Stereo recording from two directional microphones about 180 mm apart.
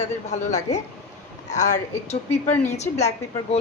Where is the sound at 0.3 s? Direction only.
40° left (ahead or behind).